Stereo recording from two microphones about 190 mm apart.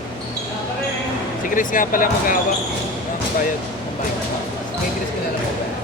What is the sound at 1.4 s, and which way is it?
Speech, 45° left (ahead or behind).